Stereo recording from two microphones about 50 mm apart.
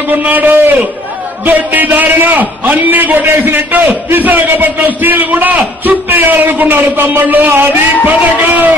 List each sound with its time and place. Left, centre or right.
0.2 s a man's voice: right